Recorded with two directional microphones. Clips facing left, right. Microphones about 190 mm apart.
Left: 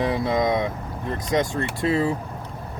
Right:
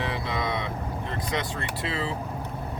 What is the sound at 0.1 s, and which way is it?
Speech, 45° left (ahead or behind).